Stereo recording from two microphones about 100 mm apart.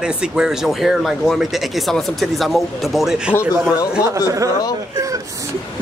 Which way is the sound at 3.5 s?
20° right (ahead or behind).